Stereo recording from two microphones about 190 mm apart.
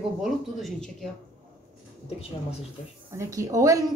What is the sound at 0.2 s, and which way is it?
Speech, centre (ahead or behind).